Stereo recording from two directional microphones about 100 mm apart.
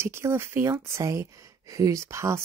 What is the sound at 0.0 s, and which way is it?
Speech, 25° right (ahead or behind).